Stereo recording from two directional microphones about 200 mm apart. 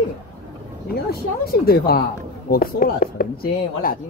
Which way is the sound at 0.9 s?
50° left (ahead or behind).